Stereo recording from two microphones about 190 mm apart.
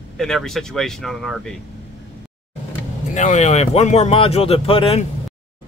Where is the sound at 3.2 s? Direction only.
40° left (ahead or behind).